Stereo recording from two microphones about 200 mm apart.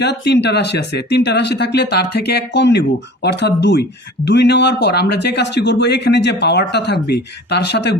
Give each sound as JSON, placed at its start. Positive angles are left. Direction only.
{"t": 0.0, "sound": "speech", "side_deg": 55}